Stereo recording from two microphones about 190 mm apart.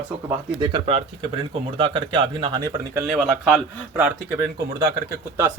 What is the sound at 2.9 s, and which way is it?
Speech, 5° right (ahead or behind).